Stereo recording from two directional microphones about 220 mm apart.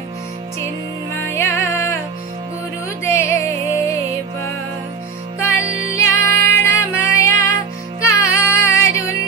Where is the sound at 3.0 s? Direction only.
10° left (ahead or behind).